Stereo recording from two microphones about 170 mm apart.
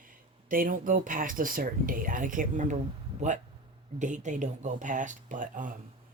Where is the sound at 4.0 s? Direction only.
45° right (ahead or behind).